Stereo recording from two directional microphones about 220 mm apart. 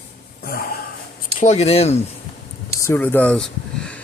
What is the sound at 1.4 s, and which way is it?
Speech, 30° left (ahead or behind).